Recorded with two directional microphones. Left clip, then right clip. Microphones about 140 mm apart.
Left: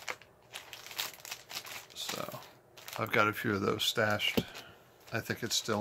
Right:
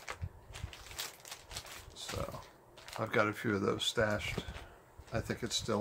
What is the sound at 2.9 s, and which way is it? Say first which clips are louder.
Speech: left 3 dB; 5° right (ahead or behind).